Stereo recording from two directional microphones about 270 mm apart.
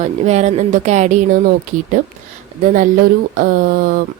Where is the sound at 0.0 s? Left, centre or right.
Right.